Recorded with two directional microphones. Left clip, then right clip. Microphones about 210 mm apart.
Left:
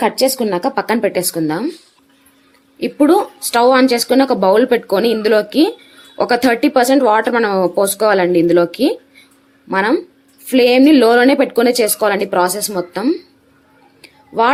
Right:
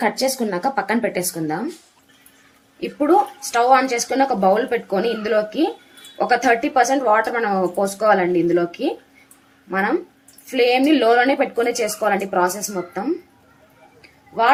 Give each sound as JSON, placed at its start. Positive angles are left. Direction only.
{"t": 0.0, "sound": "speech", "side_deg": 40}
{"t": 2.8, "sound": "speech", "side_deg": 45}